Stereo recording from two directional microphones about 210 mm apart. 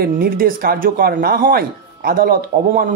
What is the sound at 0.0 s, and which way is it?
A man's voice, 45° right (ahead or behind).